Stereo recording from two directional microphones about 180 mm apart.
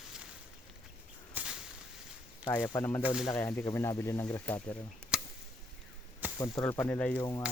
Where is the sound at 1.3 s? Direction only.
5° right (ahead or behind).